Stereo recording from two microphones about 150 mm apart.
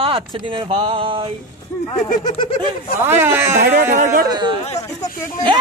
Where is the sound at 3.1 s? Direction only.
15° right (ahead or behind).